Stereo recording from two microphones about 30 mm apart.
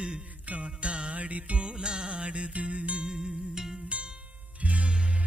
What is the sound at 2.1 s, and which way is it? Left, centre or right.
Music, right.